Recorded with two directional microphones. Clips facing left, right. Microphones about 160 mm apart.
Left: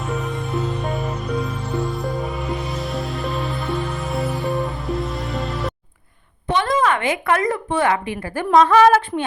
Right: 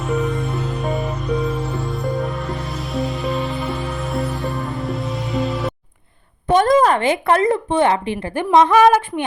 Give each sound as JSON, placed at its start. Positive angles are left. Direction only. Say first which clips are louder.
{"t": 0.0, "sound": "music", "louder": "right 5 dB", "side_deg": 0}
{"t": 6.5, "sound": "a woman's voice", "louder": "right 5 dB", "side_deg": -45}